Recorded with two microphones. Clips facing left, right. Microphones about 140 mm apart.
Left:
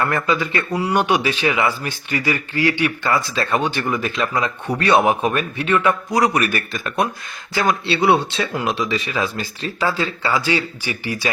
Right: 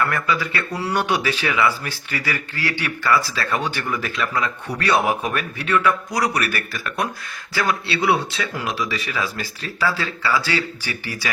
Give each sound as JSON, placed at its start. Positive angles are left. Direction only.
{"t": 0.1, "sound": "speech", "side_deg": 25}